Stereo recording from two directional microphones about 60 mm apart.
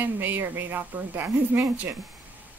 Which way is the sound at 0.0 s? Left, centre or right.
Right.